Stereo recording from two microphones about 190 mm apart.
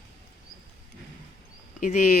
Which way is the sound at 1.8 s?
45° left (ahead or behind).